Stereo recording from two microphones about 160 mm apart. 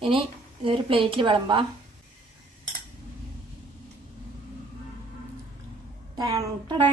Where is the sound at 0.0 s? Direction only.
35° right (ahead or behind).